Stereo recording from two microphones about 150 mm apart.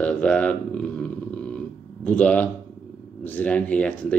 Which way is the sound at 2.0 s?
10° left (ahead or behind).